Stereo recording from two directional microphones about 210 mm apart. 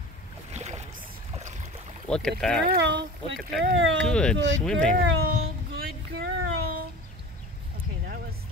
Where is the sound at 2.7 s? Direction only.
55° right (ahead or behind).